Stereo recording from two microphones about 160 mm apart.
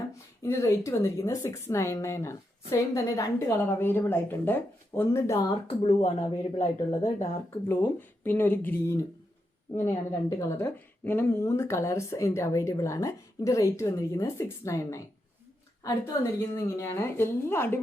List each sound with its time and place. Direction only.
0.1 s speech: 15° left (ahead or behind)
5.5 s speech: 35° left (ahead or behind)
6.0 s speech: 45° left (ahead or behind)
7.7 s a woman's voice: 15° left (ahead or behind)